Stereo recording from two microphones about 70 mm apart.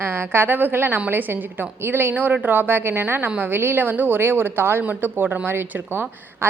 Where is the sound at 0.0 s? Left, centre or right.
Right.